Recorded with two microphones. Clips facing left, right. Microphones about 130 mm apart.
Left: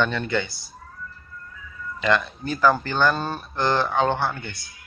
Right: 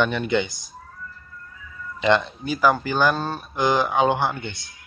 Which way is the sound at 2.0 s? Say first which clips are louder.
Right 3 dB; 25° right (ahead or behind).